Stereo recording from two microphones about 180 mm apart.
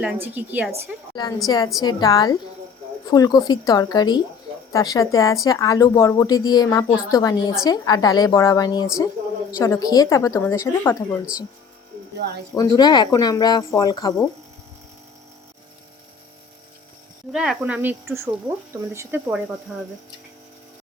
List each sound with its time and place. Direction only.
0.0 s a woman's voice: 10° right (ahead or behind)
1.5 s a woman's voice: 20° left (ahead or behind)
12.5 s speech: 25° left (ahead or behind)
17.3 s speech: centre (ahead or behind)